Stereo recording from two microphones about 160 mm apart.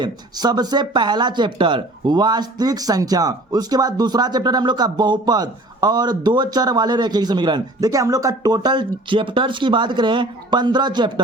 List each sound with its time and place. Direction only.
0.0 s speech: 25° right (ahead or behind)